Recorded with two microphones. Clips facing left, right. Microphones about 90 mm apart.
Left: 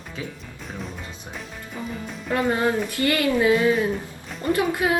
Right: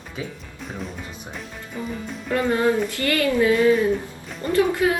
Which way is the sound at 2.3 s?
20° left (ahead or behind).